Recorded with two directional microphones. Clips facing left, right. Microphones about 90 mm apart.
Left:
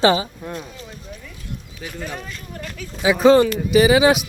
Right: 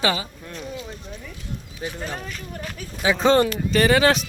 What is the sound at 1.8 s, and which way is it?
Speech, 25° right (ahead or behind).